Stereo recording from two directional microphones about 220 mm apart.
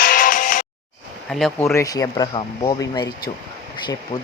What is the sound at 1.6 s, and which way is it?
Speech, 10° left (ahead or behind).